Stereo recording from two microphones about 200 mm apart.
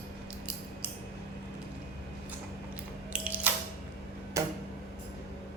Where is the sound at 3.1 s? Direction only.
5° right (ahead or behind).